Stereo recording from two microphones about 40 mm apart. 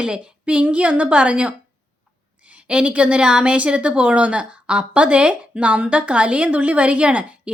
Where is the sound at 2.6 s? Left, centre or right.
Right.